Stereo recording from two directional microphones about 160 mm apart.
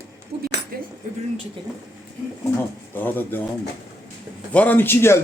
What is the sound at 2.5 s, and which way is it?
Speech, 10° left (ahead or behind).